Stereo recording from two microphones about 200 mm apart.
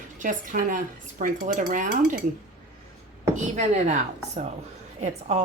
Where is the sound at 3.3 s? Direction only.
35° right (ahead or behind).